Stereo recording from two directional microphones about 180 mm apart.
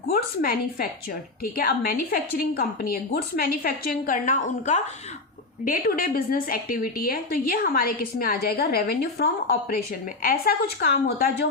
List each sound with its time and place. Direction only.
0.1 s a woman's voice: 55° left (ahead or behind)